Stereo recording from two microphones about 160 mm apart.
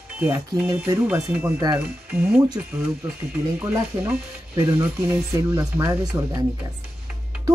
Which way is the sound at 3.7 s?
15° right (ahead or behind).